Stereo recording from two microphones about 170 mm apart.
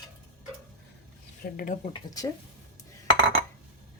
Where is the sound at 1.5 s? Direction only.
50° left (ahead or behind).